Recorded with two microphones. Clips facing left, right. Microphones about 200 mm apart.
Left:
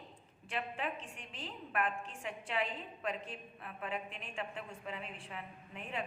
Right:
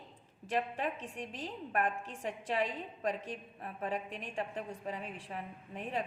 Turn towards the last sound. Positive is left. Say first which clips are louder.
# right 5 dB
turn(degrees=-40)  # may be behind; listen again after turning